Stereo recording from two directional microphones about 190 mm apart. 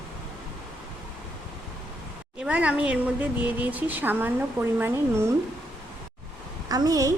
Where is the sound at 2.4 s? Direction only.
5° right (ahead or behind).